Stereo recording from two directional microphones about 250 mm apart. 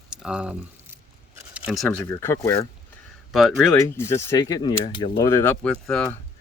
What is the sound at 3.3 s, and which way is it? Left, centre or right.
Speech, centre.